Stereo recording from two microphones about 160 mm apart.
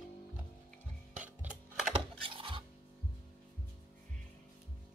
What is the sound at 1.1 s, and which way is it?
Music, 10° right (ahead or behind).